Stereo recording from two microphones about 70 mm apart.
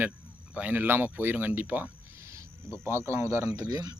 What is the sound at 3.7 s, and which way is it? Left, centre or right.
Speech, right.